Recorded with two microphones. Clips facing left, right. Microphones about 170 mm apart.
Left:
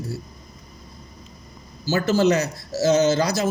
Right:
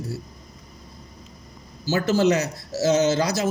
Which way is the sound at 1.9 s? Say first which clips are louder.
Left 1 dB; 20° right (ahead or behind).